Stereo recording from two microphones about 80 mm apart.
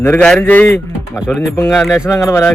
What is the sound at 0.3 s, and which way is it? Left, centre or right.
Speech, left.